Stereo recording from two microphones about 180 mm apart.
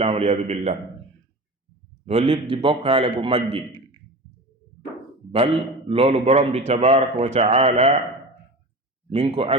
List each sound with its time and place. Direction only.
0.0 s a man's voice: 35° right (ahead or behind)
2.0 s a man's voice: 35° right (ahead or behind)
5.9 s a man's voice: 30° right (ahead or behind)
9.0 s a man's voice: 35° right (ahead or behind)